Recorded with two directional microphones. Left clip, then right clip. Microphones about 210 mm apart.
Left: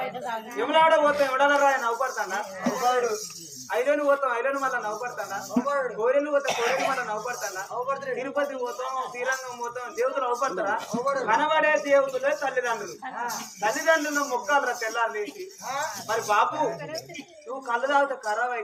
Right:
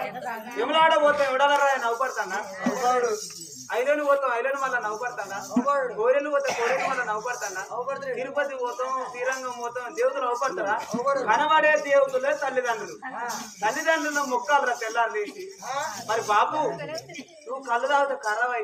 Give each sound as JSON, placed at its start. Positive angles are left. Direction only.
{"t": 0.5, "sound": "a man's voice", "side_deg": -5}
{"t": 3.7, "sound": "a man's voice", "side_deg": -5}
{"t": 6.5, "sound": "speech", "side_deg": 45}
{"t": 7.1, "sound": "a man's voice", "side_deg": -5}
{"t": 10.0, "sound": "a man's voice", "side_deg": -5}
{"t": 17.7, "sound": "a man's voice", "side_deg": -5}